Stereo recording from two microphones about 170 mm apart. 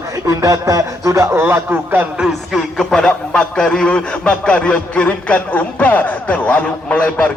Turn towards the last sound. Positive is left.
turn(degrees=10)  # may be behind; listen again after turning